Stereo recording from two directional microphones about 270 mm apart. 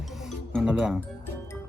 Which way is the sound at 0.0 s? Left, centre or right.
Centre.